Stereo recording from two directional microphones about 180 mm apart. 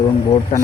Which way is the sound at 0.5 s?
35° left (ahead or behind).